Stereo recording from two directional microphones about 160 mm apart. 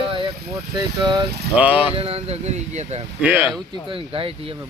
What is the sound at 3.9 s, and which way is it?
Speech, 35° right (ahead or behind).